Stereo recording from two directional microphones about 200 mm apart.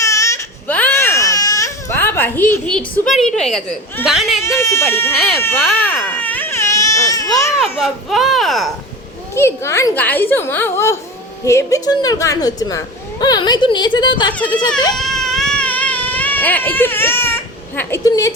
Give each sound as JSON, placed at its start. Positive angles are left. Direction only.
{"t": 0.1, "sound": "baby cry", "side_deg": 15}
{"t": 4.4, "sound": "speech", "side_deg": 15}
{"t": 5.1, "sound": "a child's voice", "side_deg": 0}
{"t": 5.4, "sound": "speech", "side_deg": 10}
{"t": 6.0, "sound": "baby cry", "side_deg": 10}
{"t": 7.8, "sound": "a child's voice", "side_deg": 0}
{"t": 9.3, "sound": "speech", "side_deg": 15}
{"t": 14.9, "sound": "baby cry", "side_deg": 0}